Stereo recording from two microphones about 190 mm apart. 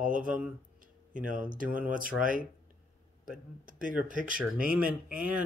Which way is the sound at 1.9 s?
45° right (ahead or behind).